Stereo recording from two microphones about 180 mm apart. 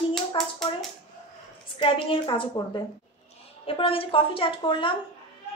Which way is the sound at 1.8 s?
30° left (ahead or behind).